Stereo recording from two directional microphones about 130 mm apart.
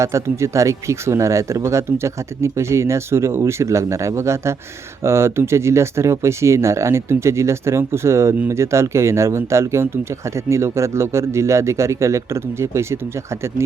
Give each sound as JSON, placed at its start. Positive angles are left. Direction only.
{"t": 0.0, "sound": "speech", "side_deg": -20}